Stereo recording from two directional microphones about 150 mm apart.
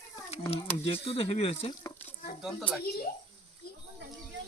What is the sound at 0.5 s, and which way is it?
Speech, 40° left (ahead or behind).